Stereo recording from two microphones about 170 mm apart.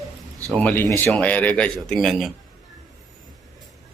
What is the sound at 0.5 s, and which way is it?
Speech, 10° left (ahead or behind).